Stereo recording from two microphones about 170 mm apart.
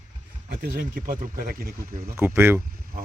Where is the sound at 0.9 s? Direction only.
55° right (ahead or behind).